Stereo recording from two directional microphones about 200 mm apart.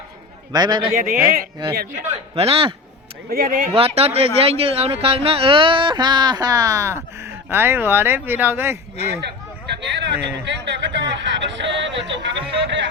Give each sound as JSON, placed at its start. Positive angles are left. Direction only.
{"t": 0.5, "sound": "speech", "side_deg": -20}
{"t": 0.9, "sound": "speech", "side_deg": -45}
{"t": 2.3, "sound": "speech", "side_deg": -30}
{"t": 3.2, "sound": "speech", "side_deg": -45}
{"t": 3.7, "sound": "speech", "side_deg": -30}
{"t": 9.8, "sound": "speech", "side_deg": -60}